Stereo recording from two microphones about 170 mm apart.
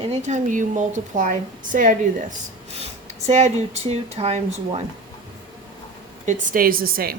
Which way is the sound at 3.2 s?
40° right (ahead or behind).